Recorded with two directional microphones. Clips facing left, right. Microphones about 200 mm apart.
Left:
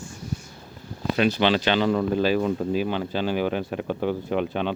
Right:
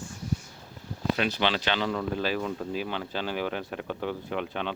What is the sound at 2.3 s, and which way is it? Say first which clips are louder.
Speech: left 7 dB; 20° left (ahead or behind).